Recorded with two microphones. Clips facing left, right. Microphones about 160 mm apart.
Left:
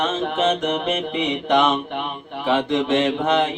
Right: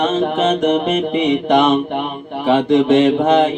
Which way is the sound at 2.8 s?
5° right (ahead or behind).